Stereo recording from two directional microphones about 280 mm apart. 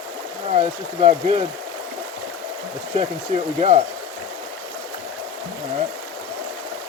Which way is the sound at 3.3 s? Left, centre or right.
Right.